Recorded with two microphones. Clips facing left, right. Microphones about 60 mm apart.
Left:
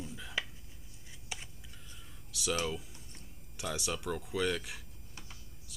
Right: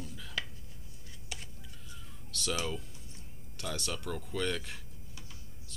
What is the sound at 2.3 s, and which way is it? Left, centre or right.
Music, centre.